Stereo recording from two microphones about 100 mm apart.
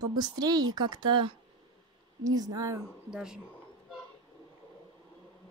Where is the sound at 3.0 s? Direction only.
5° right (ahead or behind).